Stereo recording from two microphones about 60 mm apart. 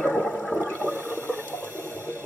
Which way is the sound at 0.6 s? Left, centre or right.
Left.